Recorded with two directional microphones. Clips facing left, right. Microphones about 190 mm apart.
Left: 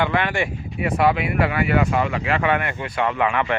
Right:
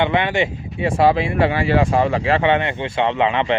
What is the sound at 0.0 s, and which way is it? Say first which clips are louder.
Speech: right 3 dB; 20° right (ahead or behind).